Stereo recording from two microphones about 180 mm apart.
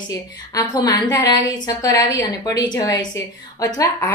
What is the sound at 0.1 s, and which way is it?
A woman's voice, 20° left (ahead or behind).